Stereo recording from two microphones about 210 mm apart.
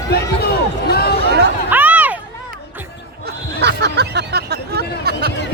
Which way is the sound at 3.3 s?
50° right (ahead or behind).